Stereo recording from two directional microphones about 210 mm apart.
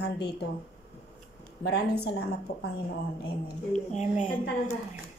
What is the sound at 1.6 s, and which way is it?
A woman's voice, 50° left (ahead or behind).